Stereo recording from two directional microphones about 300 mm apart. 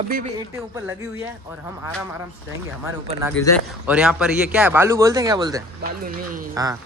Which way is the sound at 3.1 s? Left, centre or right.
Centre.